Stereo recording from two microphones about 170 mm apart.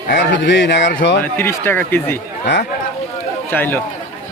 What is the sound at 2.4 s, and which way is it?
Speech, 90° left.